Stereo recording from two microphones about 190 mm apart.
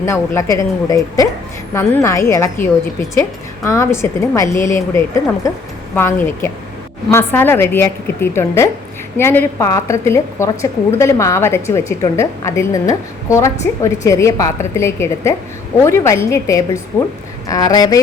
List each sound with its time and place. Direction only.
0.0 s a woman's voice: 15° left (ahead or behind)